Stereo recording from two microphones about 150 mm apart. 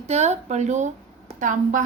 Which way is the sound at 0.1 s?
45° right (ahead or behind).